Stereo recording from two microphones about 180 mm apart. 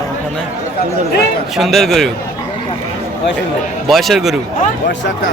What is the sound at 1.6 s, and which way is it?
Speech, centre (ahead or behind).